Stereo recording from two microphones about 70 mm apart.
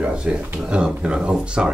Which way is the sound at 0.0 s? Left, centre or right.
Centre.